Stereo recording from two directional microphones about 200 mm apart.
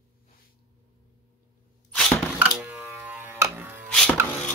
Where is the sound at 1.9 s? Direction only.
Centre (ahead or behind).